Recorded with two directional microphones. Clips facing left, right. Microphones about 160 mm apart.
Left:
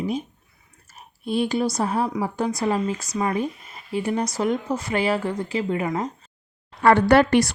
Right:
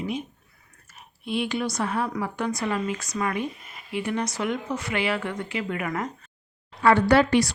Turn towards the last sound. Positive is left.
turn(degrees=50)  # may be behind; listen again after turning